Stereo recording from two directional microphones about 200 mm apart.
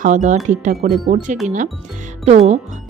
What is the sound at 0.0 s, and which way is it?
A woman's voice, 40° right (ahead or behind).